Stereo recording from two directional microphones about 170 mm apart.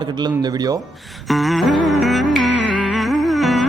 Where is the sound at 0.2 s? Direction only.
25° right (ahead or behind).